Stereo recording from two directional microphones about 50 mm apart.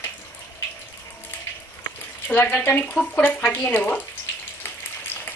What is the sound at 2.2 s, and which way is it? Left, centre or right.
Speech, left.